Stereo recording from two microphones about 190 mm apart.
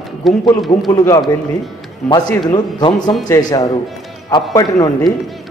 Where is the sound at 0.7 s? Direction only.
20° left (ahead or behind).